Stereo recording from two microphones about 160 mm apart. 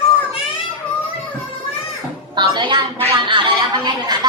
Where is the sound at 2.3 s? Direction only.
30° right (ahead or behind).